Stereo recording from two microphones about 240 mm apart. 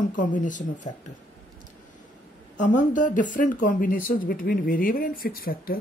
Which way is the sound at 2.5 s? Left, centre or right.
Left.